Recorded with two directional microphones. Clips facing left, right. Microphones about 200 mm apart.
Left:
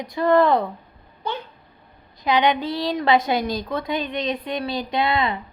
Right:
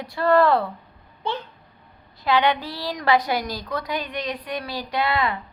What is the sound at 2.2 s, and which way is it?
A woman's voice, 20° left (ahead or behind).